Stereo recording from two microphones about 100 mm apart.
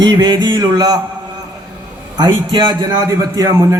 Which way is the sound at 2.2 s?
50° right (ahead or behind).